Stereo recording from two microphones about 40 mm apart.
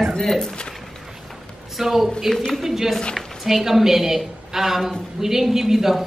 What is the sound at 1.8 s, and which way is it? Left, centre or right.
A woman's voice, centre.